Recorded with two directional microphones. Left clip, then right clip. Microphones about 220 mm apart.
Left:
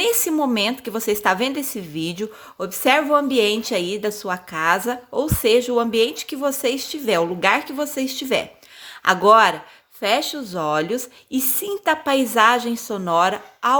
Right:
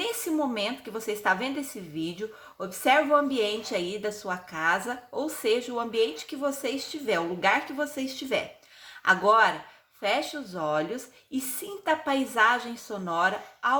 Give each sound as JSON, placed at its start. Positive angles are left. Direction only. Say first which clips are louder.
{"t": 0.0, "sound": "a woman's voice", "louder": "left 9 dB", "side_deg": 50}